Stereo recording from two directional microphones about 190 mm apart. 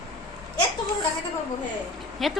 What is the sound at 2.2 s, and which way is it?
Speech, centre (ahead or behind).